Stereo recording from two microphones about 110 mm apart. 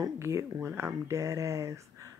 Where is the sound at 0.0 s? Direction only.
25° right (ahead or behind).